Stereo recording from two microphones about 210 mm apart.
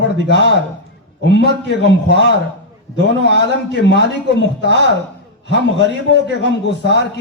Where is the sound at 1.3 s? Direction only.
55° left (ahead or behind).